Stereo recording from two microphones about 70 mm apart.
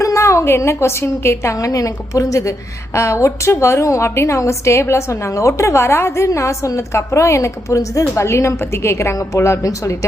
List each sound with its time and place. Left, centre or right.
0.0 s a woman's voice: left
1.5 s a woman's voice: left